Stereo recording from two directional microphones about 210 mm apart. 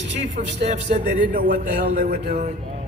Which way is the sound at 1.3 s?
40° right (ahead or behind).